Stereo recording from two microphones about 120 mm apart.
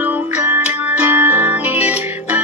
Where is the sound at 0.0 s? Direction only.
15° right (ahead or behind).